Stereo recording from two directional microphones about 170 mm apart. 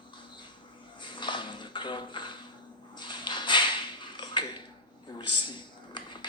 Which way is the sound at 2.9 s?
25° left (ahead or behind).